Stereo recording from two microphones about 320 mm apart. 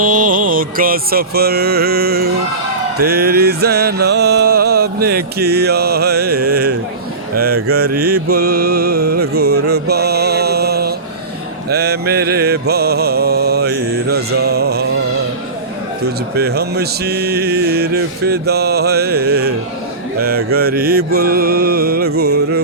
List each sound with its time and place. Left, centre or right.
0.0 s mantra: right
3.0 s music: right
11.7 s mantra: right
16.6 s music: right
20.6 s music: right